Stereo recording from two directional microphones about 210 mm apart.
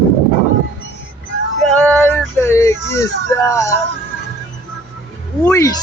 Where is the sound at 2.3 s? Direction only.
15° left (ahead or behind).